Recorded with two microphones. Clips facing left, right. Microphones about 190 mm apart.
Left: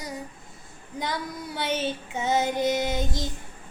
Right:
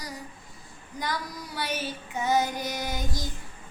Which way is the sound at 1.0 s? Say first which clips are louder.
Left 2 dB; 25° left (ahead or behind).